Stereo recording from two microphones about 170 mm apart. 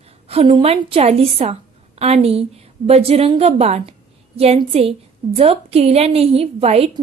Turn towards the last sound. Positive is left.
turn(degrees=-35)  # may be behind; listen again after turning